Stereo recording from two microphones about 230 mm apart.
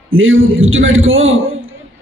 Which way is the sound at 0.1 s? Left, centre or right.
Right.